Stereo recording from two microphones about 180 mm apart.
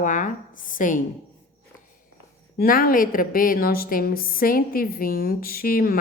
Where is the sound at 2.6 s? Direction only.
55° left (ahead or behind).